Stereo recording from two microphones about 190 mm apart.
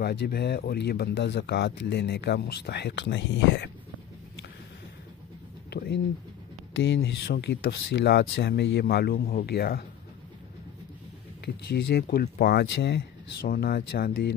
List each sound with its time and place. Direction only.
0.0 s speech: 60° left (ahead or behind)
5.7 s a sound: 60° left (ahead or behind)
6.8 s speech: 65° left (ahead or behind)
11.4 s speech: 60° left (ahead or behind)